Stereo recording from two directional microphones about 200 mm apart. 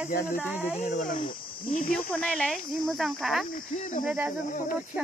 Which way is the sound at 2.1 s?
5° left (ahead or behind).